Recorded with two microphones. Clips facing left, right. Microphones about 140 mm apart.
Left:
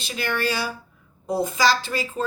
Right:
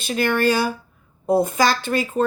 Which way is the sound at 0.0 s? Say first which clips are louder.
Right 7 dB; 50° right (ahead or behind).